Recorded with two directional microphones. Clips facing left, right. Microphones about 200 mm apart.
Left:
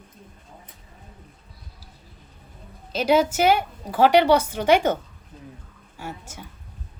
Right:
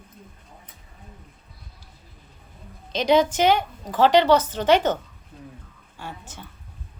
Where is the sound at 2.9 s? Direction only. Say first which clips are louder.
Even; 5° left (ahead or behind).